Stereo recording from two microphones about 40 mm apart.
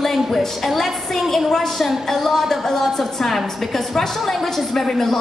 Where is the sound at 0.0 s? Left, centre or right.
Centre.